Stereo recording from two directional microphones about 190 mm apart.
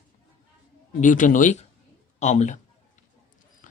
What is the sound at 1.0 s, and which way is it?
A man's voice, 40° left (ahead or behind).